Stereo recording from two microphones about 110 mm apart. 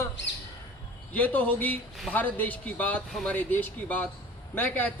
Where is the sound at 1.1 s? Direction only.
15° left (ahead or behind).